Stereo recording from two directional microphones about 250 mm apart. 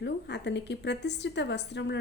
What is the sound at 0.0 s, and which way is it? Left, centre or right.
Speech, left.